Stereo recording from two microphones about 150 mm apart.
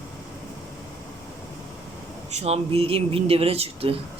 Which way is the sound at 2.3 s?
45° right (ahead or behind).